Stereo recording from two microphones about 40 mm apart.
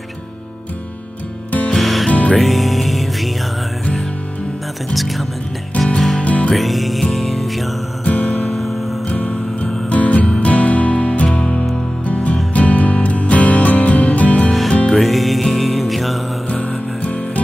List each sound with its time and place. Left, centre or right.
1.7 s music: centre
2.0 s music: left
2.3 s music: centre
4.9 s speech: centre
5.9 s music: centre
6.2 s music: left
6.5 s music: centre
8.0 s music: left
8.5 s music: centre
9.1 s music: left
15.0 s music: centre
16.6 s music: left